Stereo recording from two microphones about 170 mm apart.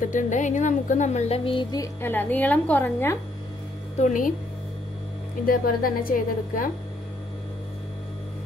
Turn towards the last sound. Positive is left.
turn(degrees=55)  # may be behind; listen again after turning